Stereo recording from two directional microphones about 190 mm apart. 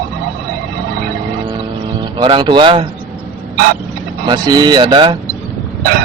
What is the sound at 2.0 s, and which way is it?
Speech, 25° right (ahead or behind).